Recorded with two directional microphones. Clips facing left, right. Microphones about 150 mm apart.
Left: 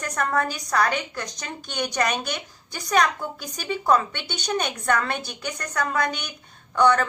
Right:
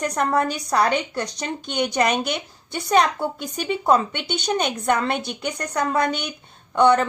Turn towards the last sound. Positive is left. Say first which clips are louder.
# right 3 dB
turn(degrees=-25)  # may be behind; listen again after turning